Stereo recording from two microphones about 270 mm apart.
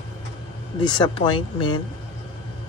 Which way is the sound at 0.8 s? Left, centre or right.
Centre.